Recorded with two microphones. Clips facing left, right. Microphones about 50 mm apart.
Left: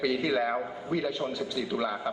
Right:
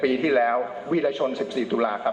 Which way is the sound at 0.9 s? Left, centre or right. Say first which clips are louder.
Right 7 dB; right.